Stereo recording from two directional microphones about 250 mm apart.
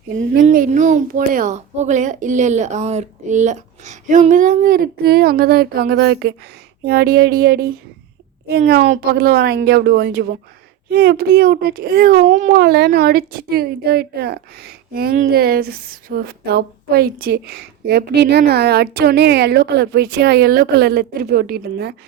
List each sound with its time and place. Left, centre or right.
0.4 s a child's voice: right